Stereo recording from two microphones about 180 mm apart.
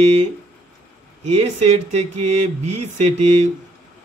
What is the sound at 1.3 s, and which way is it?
A man's voice, 35° right (ahead or behind).